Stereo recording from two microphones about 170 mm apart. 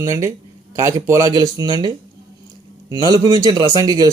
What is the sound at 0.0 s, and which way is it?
Speech, 15° right (ahead or behind).